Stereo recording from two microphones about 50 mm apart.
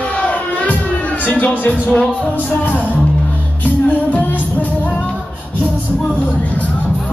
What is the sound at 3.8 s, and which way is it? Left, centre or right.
Music, left.